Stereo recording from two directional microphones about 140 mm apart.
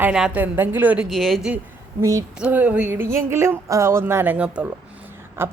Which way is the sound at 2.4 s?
10° right (ahead or behind).